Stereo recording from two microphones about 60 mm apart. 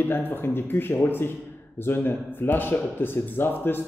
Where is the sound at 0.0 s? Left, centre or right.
Left.